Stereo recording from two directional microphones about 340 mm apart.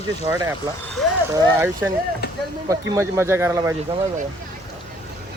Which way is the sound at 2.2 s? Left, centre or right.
Left.